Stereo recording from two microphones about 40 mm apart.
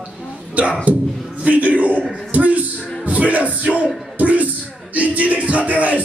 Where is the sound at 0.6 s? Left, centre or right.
Right.